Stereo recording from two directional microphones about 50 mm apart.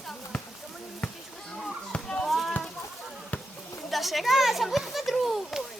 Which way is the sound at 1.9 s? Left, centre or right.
Left.